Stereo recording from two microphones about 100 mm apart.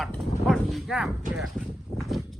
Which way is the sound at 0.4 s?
Centre (ahead or behind).